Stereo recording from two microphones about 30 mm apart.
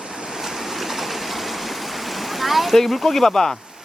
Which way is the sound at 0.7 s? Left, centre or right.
Centre.